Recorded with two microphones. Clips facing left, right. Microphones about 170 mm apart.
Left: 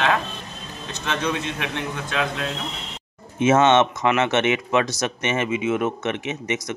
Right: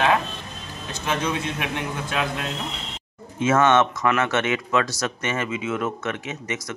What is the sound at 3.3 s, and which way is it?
Speech, 20° left (ahead or behind).